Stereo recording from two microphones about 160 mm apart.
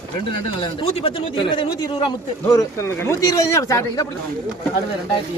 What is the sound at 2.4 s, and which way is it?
Speech, 20° left (ahead or behind).